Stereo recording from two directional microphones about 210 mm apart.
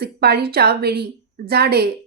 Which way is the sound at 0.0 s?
50° right (ahead or behind).